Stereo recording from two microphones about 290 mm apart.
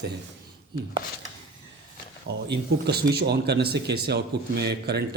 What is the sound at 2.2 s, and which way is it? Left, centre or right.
Speech, right.